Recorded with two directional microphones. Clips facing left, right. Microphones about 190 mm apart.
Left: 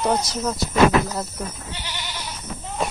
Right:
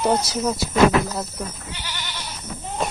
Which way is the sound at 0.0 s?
5° right (ahead or behind).